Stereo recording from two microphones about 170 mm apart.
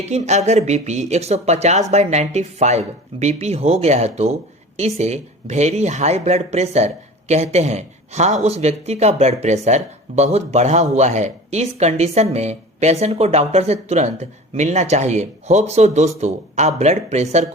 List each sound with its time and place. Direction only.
0.0 s speech: 40° right (ahead or behind)